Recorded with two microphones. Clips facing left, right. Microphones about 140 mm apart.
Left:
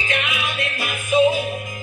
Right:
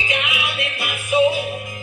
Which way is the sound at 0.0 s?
20° right (ahead or behind).